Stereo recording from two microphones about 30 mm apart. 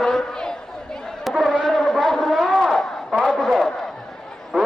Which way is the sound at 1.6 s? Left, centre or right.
Centre.